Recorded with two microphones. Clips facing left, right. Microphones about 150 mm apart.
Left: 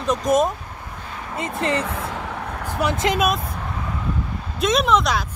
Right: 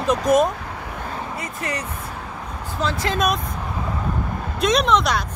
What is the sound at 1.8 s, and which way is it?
Vehicle, 90° left.